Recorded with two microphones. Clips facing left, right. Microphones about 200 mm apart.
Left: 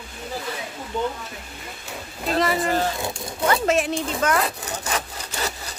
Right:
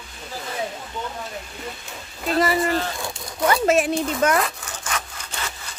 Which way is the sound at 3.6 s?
10° right (ahead or behind).